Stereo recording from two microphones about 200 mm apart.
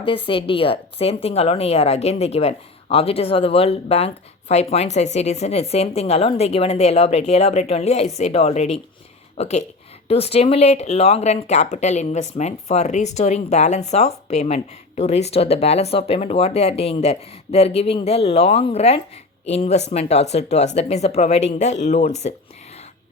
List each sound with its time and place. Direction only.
0.0 s speech: 25° left (ahead or behind)